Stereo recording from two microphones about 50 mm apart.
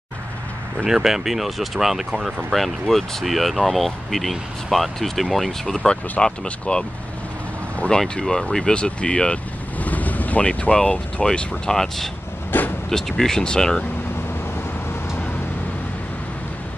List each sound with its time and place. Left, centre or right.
0.8 s speech: centre
6.2 s speech: centre
8.2 s speech: centre
9.8 s speech: left; by 12.1 s centre
12.5 s vehicle: left
12.9 s speech: centre